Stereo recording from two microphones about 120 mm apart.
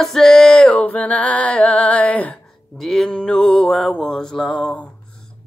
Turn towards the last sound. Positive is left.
turn(degrees=5)  # may be behind; listen again after turning